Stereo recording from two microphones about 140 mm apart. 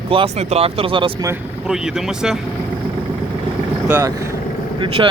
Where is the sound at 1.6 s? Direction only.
5° right (ahead or behind).